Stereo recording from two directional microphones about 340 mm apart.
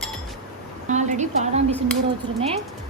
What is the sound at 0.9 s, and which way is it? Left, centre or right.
Speech, right.